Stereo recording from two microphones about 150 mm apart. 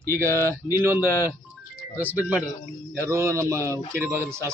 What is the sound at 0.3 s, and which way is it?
A man's voice, 15° right (ahead or behind).